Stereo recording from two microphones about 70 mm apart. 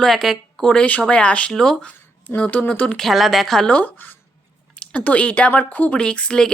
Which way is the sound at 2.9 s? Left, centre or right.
Centre.